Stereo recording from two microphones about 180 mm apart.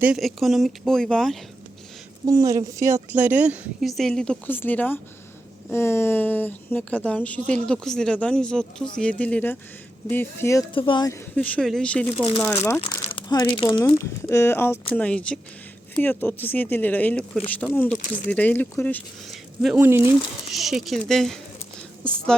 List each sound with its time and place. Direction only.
0.0 s a woman's voice: centre (ahead or behind)
2.2 s a woman's voice: 15° right (ahead or behind); by 10.7 s 15° left (ahead or behind)
10.8 s speech: 25° left (ahead or behind)
11.3 s a woman's voice: 5° left (ahead or behind)
12.1 s speech: 35° left (ahead or behind)
13.9 s a woman's voice: 15° left (ahead or behind)
19.3 s a woman's voice: 5° right (ahead or behind)